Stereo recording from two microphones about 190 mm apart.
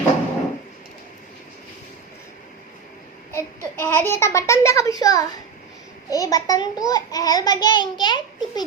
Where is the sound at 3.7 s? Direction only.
10° left (ahead or behind).